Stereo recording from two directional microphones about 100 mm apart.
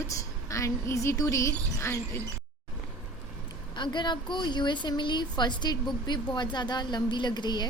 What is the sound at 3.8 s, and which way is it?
A woman's voice, 50° left (ahead or behind).